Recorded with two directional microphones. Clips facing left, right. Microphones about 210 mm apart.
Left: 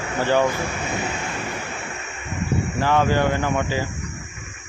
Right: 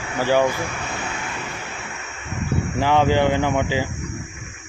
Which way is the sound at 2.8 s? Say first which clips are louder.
Right 2 dB; 15° right (ahead or behind).